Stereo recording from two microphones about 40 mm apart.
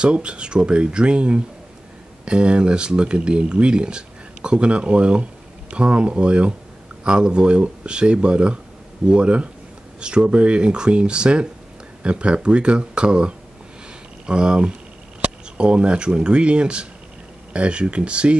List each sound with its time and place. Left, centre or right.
0.0 s speech: right